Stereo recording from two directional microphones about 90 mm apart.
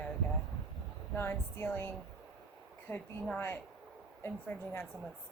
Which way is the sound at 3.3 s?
20° left (ahead or behind).